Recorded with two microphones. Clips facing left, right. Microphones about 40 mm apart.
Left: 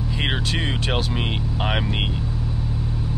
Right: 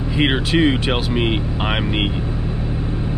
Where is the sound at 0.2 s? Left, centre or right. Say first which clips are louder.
Right 9 dB; centre.